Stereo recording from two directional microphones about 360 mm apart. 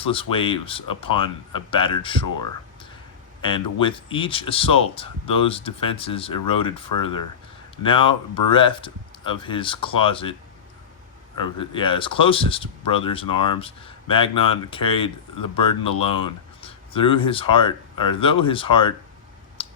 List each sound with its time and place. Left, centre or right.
0.0 s speech: centre
7.8 s speech: centre
11.3 s speech: centre
19.6 s typing: centre